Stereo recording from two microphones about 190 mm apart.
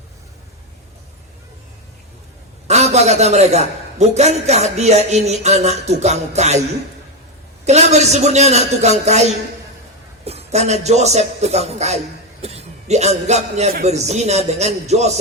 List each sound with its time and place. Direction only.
2.6 s a man's voice: 35° right (ahead or behind)
7.6 s a man's voice: 35° right (ahead or behind)